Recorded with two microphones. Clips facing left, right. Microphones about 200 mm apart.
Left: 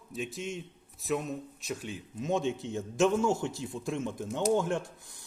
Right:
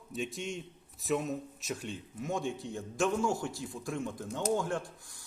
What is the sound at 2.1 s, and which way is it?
A man's voice, 20° left (ahead or behind).